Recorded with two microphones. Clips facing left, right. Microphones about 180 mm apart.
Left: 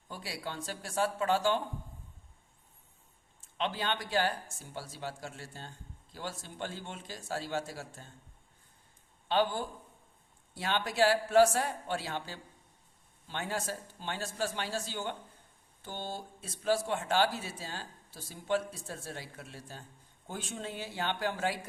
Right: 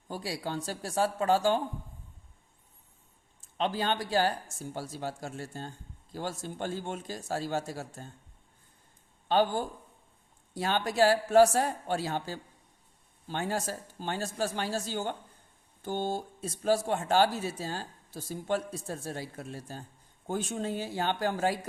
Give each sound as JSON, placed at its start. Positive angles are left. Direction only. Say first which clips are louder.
{"t": 0.1, "sound": "a man's voice", "louder": "right 6 dB", "side_deg": -40}
{"t": 3.6, "sound": "a man's voice", "louder": "right 4 dB", "side_deg": -40}
{"t": 9.3, "sound": "a man's voice", "louder": "right 3 dB", "side_deg": -45}